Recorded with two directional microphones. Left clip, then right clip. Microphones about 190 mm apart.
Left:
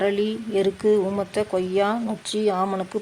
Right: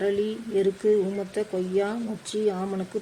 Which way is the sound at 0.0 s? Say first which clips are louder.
Left 3 dB; 20° left (ahead or behind).